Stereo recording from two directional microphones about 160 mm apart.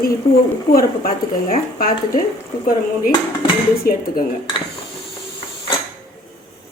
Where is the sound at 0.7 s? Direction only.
65° left (ahead or behind).